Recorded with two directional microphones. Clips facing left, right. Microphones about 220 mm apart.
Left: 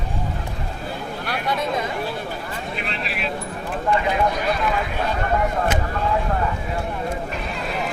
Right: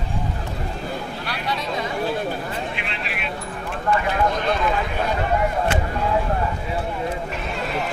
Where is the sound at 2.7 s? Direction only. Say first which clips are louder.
Left 2 dB; 40° left (ahead or behind).